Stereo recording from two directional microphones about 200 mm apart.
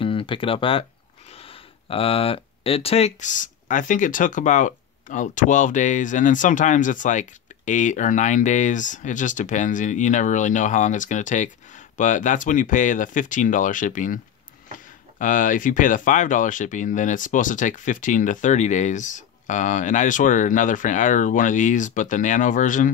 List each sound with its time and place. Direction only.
0.0 s speech: 25° left (ahead or behind)